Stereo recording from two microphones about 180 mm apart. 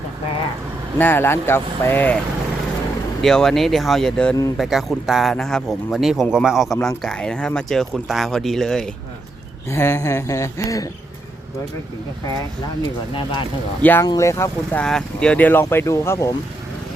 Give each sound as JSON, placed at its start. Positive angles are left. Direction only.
{"t": 0.9, "sound": "speech", "side_deg": 10}
{"t": 9.6, "sound": "speech", "side_deg": 15}
{"t": 13.8, "sound": "speech", "side_deg": 10}